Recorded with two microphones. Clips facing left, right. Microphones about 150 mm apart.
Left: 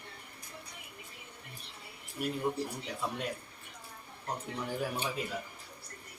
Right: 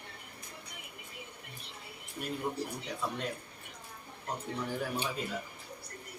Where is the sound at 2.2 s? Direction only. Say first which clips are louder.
Left 4 dB; centre (ahead or behind).